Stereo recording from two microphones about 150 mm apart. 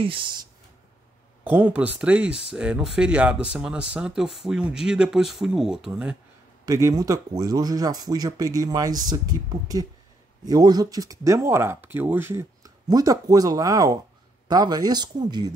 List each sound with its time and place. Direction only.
0.0 s speech: 35° right (ahead or behind)
1.4 s speech: 10° right (ahead or behind)
6.6 s speech: 20° right (ahead or behind)